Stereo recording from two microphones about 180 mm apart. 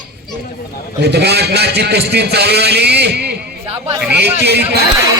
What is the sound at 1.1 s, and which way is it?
A man's voice, 65° right (ahead or behind).